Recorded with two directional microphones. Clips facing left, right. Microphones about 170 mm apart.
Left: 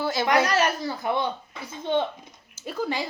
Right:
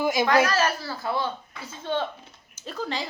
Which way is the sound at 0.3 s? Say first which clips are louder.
Left 3 dB; 20° left (ahead or behind).